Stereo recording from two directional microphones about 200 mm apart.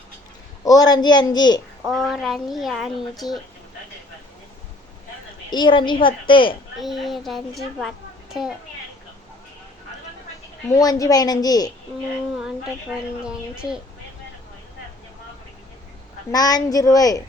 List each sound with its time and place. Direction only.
0.6 s a woman's voice: 20° left (ahead or behind)
1.9 s speech: centre (ahead or behind)
5.5 s a woman's voice: 25° left (ahead or behind)
6.7 s a woman's voice: centre (ahead or behind)
10.7 s a woman's voice: 15° left (ahead or behind)
13.2 s speech: 5° right (ahead or behind)
16.3 s a woman's voice: 20° left (ahead or behind)